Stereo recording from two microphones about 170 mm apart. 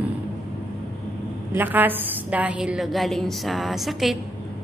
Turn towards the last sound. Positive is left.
turn(degrees=0)  # may be behind; listen again after turning